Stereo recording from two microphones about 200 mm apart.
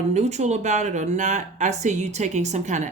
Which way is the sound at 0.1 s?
35° right (ahead or behind).